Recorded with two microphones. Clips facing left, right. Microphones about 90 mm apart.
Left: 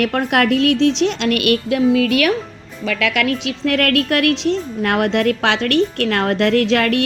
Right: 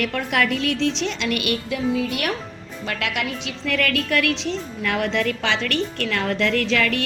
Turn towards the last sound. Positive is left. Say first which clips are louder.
# left 6 dB
turn(degrees=55)  # may be behind; listen again after turning